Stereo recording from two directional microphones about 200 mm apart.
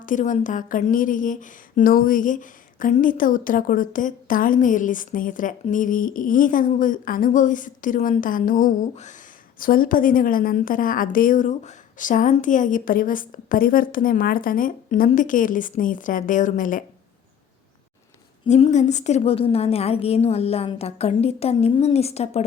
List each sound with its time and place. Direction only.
0.0 s a woman's voice: 40° left (ahead or behind)
18.4 s a woman's voice: 35° left (ahead or behind)